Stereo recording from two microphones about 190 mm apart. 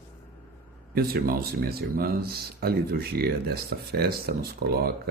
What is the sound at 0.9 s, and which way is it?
Speech, 55° right (ahead or behind).